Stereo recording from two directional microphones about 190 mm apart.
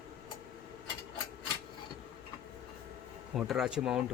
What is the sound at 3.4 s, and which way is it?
Speech, 5° right (ahead or behind).